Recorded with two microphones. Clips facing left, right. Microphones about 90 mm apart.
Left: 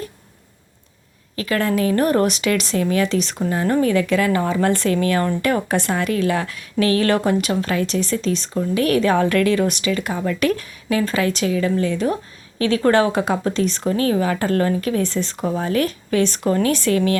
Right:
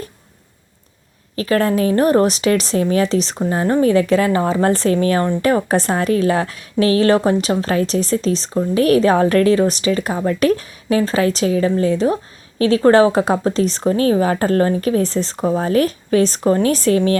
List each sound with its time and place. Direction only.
1.4 s a woman's voice: 35° right (ahead or behind)